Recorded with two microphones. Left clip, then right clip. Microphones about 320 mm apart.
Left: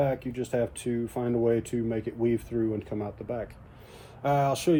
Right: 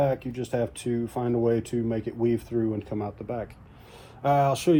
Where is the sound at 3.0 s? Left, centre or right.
Centre.